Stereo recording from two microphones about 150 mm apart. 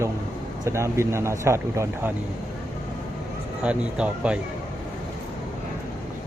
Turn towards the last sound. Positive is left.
turn(degrees=-5)  # may be behind; listen again after turning